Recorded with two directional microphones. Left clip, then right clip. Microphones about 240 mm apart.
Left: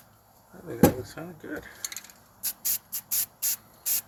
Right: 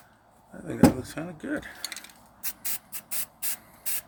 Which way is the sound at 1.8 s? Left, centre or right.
Right.